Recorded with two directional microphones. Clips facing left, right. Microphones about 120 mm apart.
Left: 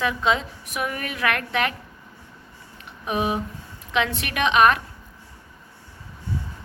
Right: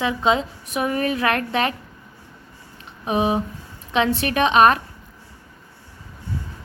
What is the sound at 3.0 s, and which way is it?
A woman's voice, 25° right (ahead or behind).